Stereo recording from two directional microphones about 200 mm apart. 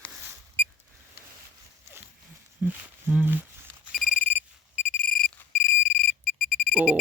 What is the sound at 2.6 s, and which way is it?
Speech, 5° right (ahead or behind).